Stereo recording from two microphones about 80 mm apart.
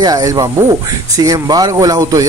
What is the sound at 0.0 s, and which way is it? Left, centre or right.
Speech, right.